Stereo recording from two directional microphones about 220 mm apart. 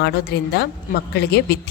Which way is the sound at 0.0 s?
45° left (ahead or behind).